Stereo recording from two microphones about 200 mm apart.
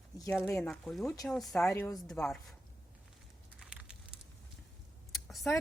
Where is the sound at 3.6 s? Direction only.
5° right (ahead or behind).